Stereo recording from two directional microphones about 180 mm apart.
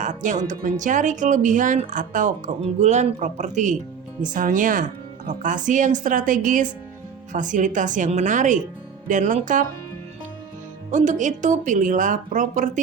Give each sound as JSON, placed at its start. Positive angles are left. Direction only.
{"t": 0.0, "sound": "speech", "side_deg": -45}
{"t": 10.9, "sound": "speech", "side_deg": -45}